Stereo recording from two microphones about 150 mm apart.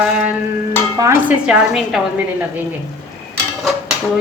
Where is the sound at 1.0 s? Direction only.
15° right (ahead or behind).